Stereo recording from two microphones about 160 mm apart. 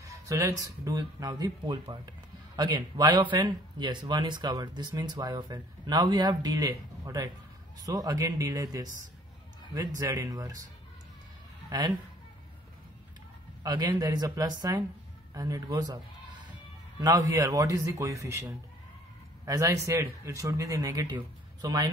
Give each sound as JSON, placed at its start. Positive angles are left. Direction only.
{"t": 0.3, "sound": "speech", "side_deg": -20}
{"t": 11.7, "sound": "speech", "side_deg": -25}
{"t": 13.6, "sound": "a man's voice", "side_deg": -25}
{"t": 19.4, "sound": "speech", "side_deg": -20}